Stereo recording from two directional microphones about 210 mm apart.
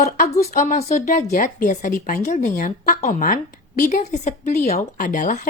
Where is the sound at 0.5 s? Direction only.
35° left (ahead or behind).